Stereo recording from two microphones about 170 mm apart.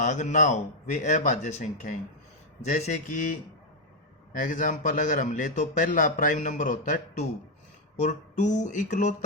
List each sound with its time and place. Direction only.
0.0 s a man's voice: 45° left (ahead or behind)